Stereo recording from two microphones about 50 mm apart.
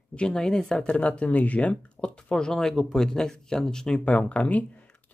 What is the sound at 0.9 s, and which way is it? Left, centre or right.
Speech, left.